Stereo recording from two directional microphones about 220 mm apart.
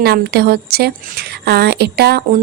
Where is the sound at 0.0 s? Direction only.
45° right (ahead or behind).